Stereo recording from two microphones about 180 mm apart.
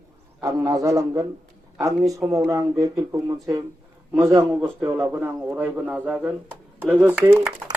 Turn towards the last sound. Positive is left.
turn(degrees=-10)  # may be behind; listen again after turning